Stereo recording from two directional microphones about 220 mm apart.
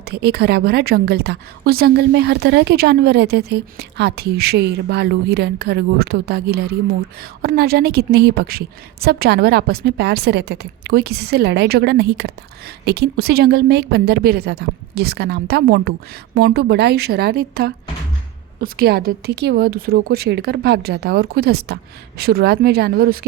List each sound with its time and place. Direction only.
0.0 s a woman's voice: 45° right (ahead or behind)